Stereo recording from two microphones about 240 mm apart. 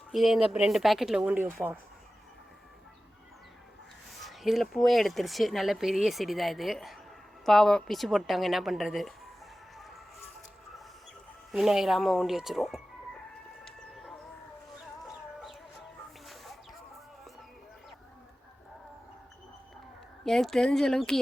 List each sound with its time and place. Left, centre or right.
0.1 s speech: centre
4.1 s speech: centre
9.7 s a sound: centre
11.5 s speech: centre
13.7 s music: centre
15.0 s chicken: centre
20.2 s speech: centre